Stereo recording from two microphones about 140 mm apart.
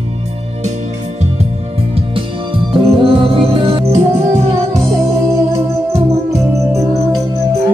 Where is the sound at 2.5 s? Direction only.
40° right (ahead or behind).